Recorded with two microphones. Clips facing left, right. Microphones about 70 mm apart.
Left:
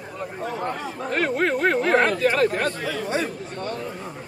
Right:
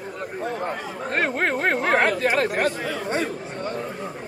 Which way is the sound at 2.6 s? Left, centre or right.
Right.